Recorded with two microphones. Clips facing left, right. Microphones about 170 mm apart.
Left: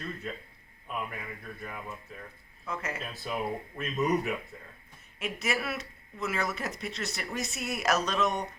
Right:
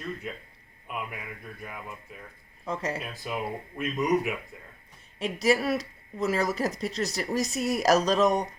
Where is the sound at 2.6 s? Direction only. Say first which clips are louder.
Right 5 dB; 30° right (ahead or behind).